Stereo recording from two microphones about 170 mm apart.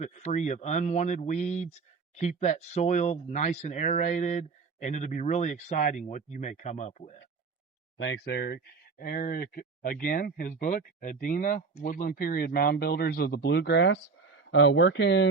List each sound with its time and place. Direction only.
0.0 s speech: 40° left (ahead or behind)
8.0 s speech: 85° left